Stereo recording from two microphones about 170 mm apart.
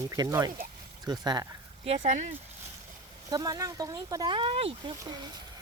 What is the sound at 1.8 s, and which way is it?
Speech, 40° right (ahead or behind).